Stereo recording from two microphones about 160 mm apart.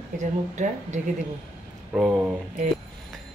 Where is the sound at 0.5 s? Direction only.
50° right (ahead or behind).